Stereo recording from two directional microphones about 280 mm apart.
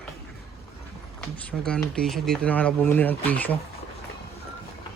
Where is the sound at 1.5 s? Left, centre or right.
Centre.